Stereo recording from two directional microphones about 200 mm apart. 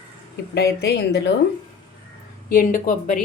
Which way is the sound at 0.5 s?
55° left (ahead or behind).